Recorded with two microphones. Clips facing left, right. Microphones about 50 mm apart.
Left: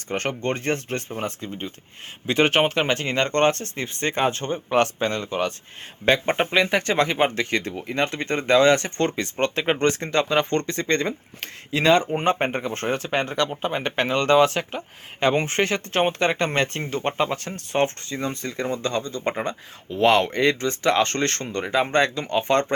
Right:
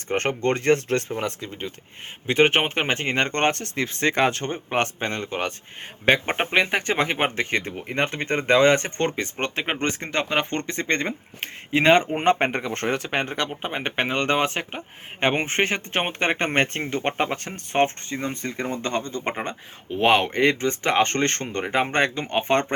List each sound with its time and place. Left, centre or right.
0.1 s speech: right
2.2 s speech: right
3.8 s speech: right
6.1 s speech: right
11.7 s speech: right
12.2 s speech: right
13.2 s speech: right
20.0 s speech: centre